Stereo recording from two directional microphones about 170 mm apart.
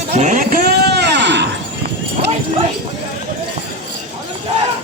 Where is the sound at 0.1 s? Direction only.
45° right (ahead or behind); by 1.5 s 90° right.